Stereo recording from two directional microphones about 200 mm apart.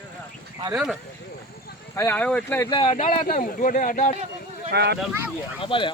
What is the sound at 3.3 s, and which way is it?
Speech, 45° left (ahead or behind).